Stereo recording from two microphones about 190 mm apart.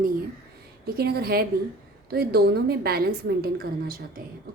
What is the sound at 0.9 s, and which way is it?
Speech, 55° right (ahead or behind).